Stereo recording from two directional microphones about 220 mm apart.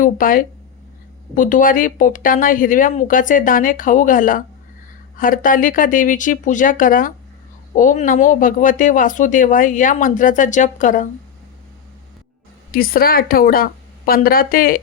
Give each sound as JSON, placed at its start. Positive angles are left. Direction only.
{"t": 0.0, "sound": "speech", "side_deg": 40}
{"t": 12.7, "sound": "speech", "side_deg": 40}